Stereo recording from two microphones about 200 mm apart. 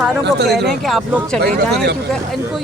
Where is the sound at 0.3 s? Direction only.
60° right (ahead or behind).